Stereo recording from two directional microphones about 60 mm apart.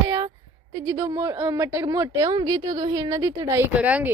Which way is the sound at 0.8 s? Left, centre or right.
Right.